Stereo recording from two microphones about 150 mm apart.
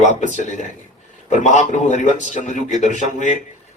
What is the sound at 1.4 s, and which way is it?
A man's voice, 55° left (ahead or behind).